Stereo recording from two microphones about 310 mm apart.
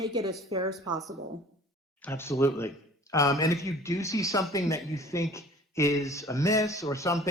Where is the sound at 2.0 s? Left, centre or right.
Centre.